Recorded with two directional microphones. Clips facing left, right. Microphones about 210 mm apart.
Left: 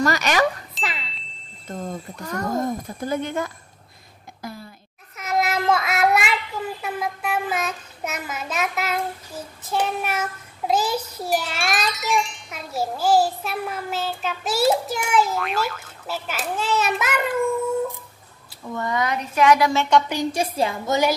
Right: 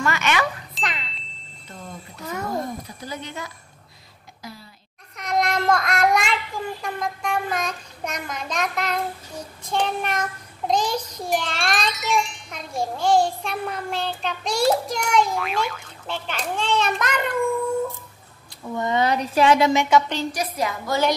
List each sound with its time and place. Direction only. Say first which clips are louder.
0.0 s speech: left 3 dB; 40° left (ahead or behind)
0.7 s music: even; centre (ahead or behind)
1.7 s speech: left 8 dB; 45° left (ahead or behind)
2.1 s child singing: even; 5° right (ahead or behind)
2.5 s speech: left 4 dB; 50° left (ahead or behind)
4.4 s a sound: left 5 dB; 50° left (ahead or behind)
5.1 s child singing: even; 5° left (ahead or behind)
18.7 s speech: right 3 dB; 20° right (ahead or behind)
20.1 s a woman's voice: left 2 dB; 10° left (ahead or behind)
20.3 s a woman's voice: left 3 dB; 30° left (ahead or behind)